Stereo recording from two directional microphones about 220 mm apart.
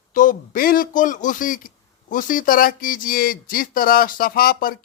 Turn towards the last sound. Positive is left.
turn(degrees=40)  # may be behind; listen again after turning